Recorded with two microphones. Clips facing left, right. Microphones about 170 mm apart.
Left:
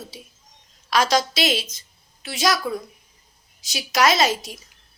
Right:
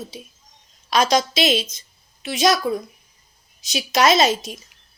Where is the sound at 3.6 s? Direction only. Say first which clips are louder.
Right 2 dB; 20° right (ahead or behind).